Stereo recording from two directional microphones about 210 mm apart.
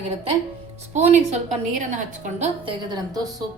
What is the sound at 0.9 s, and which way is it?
A woman's voice, 30° right (ahead or behind).